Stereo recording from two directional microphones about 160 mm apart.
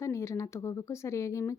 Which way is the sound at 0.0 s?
20° left (ahead or behind).